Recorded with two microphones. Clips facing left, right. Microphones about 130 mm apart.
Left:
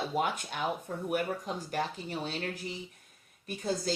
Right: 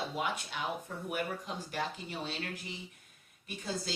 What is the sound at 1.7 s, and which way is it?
Speech, 45° left (ahead or behind).